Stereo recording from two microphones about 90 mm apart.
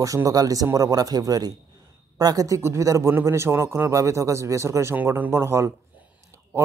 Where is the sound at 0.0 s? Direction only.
40° right (ahead or behind).